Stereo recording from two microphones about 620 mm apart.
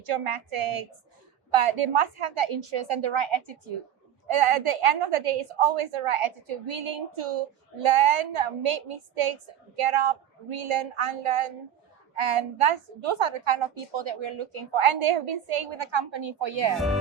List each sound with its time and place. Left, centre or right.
0.0 s a woman's voice: right
16.7 s speech: centre